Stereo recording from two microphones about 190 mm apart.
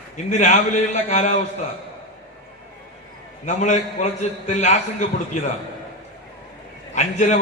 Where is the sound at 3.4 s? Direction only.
40° left (ahead or behind).